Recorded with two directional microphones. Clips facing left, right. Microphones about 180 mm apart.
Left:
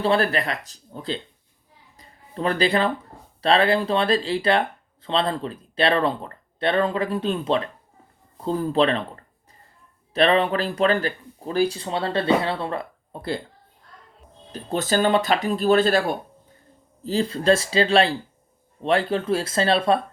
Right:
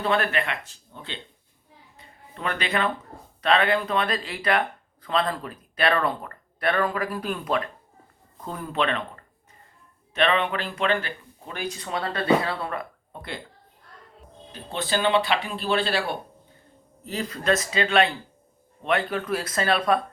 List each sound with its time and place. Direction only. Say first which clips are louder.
0.0 s speech: left 4 dB; 35° left (ahead or behind)
2.0 s music: left 7 dB; 35° left (ahead or behind)
3.4 s speech: left 3 dB; 30° left (ahead or behind)
14.5 s speech: left 5 dB; 45° left (ahead or behind)
17.0 s speech: left 7 dB; 30° left (ahead or behind)